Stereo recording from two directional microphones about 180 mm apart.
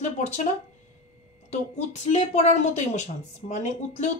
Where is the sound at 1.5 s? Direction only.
40° left (ahead or behind).